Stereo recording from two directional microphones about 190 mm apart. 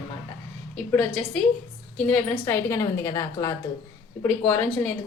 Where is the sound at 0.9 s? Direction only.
5° left (ahead or behind).